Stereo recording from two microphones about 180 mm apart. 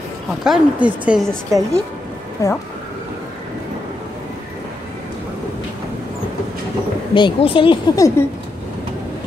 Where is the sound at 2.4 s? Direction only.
15° left (ahead or behind).